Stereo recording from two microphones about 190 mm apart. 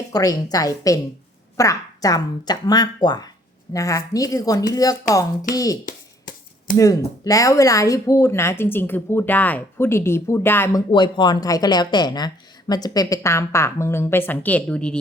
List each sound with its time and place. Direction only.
0.1 s speech: 20° left (ahead or behind)
5.8 s shuffling cards: 45° left (ahead or behind)
6.7 s speech: 15° left (ahead or behind)